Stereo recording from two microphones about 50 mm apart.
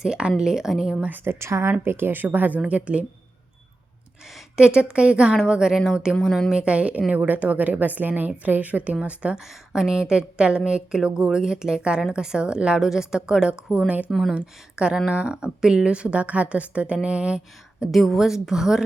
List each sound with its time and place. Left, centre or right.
0.0 s a woman's voice: centre
1.1 s a woman's voice: right
1.8 s a woman's voice: right
4.5 s a woman's voice: centre
9.3 s a woman's voice: centre
9.9 s a woman's voice: centre
13.7 s a woman's voice: right
14.1 s a woman's voice: centre
14.3 s a woman's voice: centre
17.9 s a woman's voice: centre